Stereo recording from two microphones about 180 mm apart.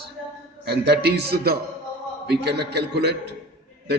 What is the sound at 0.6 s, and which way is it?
A man's voice, 65° right (ahead or behind).